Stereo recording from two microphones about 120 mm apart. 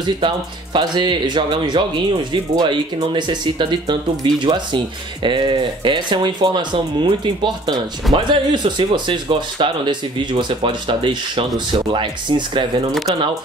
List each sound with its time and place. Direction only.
0.7 s speech: 40° right (ahead or behind)